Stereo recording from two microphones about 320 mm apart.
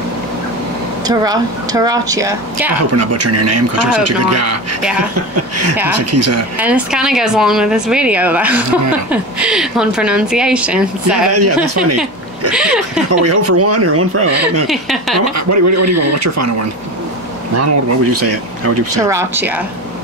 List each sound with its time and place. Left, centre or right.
1.0 s speech: centre
3.0 s speech: right
6.6 s speech: centre
11.3 s speech: right
12.5 s speech: centre
13.2 s speech: right
14.7 s speech: centre
15.3 s a man's voice: right
17.6 s speech: right
19.0 s speech: centre